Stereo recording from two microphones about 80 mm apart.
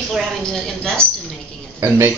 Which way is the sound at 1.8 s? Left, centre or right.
Right.